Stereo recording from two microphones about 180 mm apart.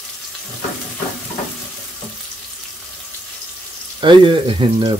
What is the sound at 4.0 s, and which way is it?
Speech, 25° right (ahead or behind).